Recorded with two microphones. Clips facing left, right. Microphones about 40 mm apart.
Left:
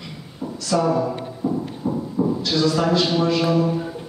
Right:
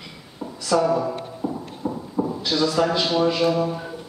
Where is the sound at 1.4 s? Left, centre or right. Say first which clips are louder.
Left 4 dB; right.